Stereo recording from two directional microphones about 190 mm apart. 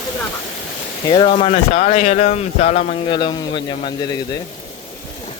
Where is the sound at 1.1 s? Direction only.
30° left (ahead or behind).